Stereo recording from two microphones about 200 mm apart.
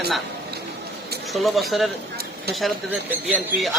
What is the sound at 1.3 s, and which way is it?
Speech, centre (ahead or behind).